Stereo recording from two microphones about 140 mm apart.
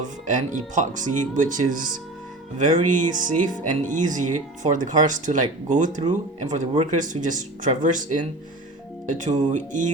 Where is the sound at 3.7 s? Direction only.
65° right (ahead or behind).